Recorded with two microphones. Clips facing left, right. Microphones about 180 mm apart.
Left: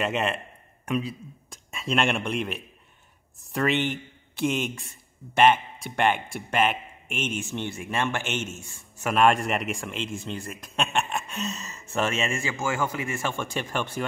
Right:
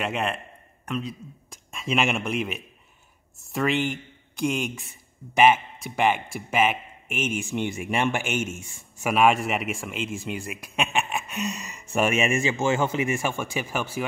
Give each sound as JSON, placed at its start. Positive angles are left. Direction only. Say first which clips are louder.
{"t": 0.0, "sound": "a man's voice", "louder": "left 1 dB", "side_deg": 0}
{"t": 1.5, "sound": "a man's voice", "louder": "even", "side_deg": 0}
{"t": 9.1, "sound": "a man's voice", "louder": "right 1 dB", "side_deg": -5}